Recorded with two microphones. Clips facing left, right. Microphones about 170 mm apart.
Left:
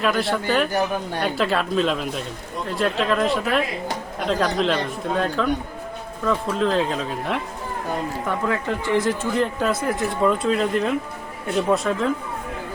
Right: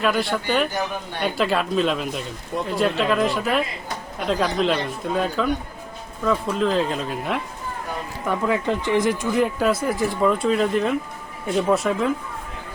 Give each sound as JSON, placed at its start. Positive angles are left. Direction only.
{"t": 0.0, "sound": "speech", "side_deg": 0}
{"t": 8.4, "sound": "speech", "side_deg": -15}
{"t": 9.6, "sound": "speech", "side_deg": -5}